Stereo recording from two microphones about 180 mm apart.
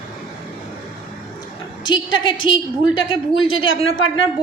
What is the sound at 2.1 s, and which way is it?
A woman's voice, 25° left (ahead or behind).